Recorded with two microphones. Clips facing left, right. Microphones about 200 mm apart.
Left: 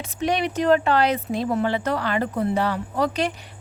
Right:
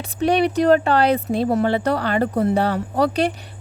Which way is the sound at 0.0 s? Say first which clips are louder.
Right 5 dB; 35° right (ahead or behind).